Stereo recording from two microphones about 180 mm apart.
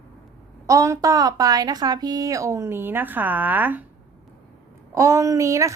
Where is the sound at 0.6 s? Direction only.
15° right (ahead or behind).